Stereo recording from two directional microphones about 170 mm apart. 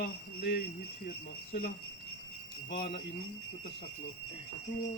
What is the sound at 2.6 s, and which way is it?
Speech, 55° left (ahead or behind).